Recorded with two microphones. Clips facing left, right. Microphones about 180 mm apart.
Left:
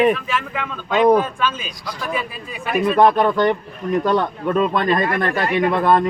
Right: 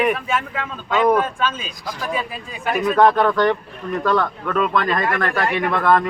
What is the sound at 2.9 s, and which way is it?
A man's voice, 15° left (ahead or behind).